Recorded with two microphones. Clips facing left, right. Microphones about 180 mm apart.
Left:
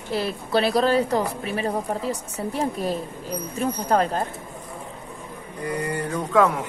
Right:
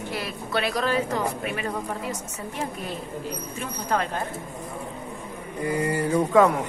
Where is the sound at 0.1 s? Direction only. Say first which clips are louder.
Left 7 dB; 30° left (ahead or behind).